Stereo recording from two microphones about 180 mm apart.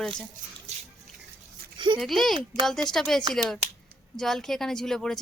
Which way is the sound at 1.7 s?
25° right (ahead or behind).